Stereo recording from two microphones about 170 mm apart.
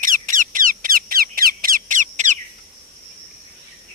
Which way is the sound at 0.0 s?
50° right (ahead or behind).